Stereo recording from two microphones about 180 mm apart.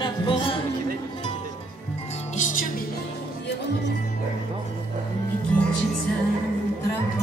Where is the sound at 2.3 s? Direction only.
45° left (ahead or behind).